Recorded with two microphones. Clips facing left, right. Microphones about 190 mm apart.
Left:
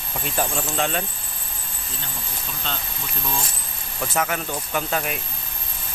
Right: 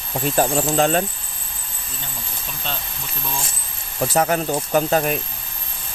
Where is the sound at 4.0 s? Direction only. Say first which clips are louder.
Right 6 dB; 35° right (ahead or behind).